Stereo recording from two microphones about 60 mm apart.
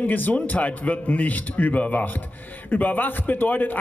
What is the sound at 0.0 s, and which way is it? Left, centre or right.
Speech, left.